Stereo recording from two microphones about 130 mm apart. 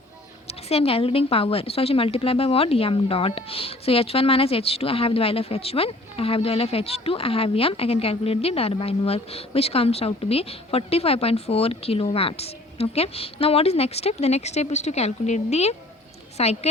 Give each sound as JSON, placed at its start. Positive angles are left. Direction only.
{"t": 0.4, "sound": "speech", "side_deg": 50}